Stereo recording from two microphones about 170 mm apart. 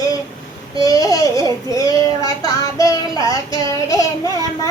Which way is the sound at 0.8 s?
20° left (ahead or behind).